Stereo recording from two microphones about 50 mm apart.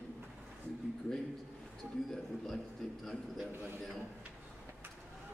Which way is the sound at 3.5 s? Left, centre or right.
Right.